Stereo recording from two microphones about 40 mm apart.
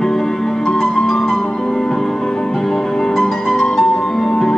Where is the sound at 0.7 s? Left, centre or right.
Centre.